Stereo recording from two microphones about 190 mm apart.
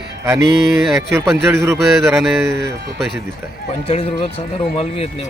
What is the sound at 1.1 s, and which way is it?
Speech, 15° right (ahead or behind).